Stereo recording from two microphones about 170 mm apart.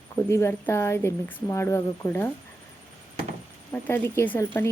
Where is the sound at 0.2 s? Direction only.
15° left (ahead or behind).